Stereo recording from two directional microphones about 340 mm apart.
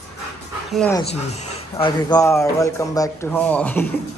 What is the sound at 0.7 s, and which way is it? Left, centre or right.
Speech, centre.